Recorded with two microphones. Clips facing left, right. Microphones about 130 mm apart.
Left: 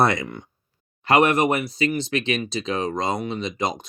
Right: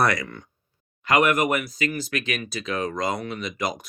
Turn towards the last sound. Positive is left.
turn(degrees=25)  # may be behind; listen again after turning